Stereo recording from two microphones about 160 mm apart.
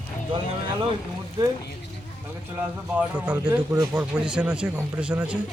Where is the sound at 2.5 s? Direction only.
10° right (ahead or behind).